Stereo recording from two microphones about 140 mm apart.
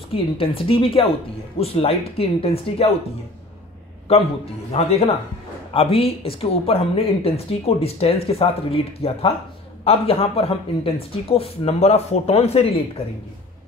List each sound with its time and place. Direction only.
0.1 s a woman's voice: 40° left (ahead or behind)
4.7 s speech: 45° left (ahead or behind)